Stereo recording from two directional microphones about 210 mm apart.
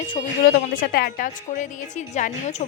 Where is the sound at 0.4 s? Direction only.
45° left (ahead or behind).